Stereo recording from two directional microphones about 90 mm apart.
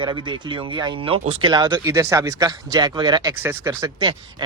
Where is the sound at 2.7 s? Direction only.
50° right (ahead or behind).